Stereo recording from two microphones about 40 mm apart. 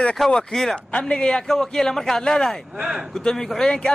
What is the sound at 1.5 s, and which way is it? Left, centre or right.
Speech, centre.